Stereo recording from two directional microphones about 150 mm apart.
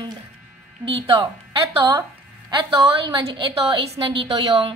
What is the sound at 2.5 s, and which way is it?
Speech, 30° right (ahead or behind).